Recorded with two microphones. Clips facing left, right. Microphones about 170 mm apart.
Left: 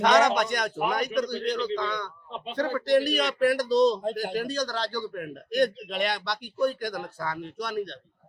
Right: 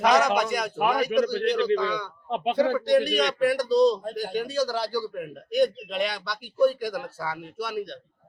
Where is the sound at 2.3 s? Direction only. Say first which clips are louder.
Right 13 dB; 70° right (ahead or behind).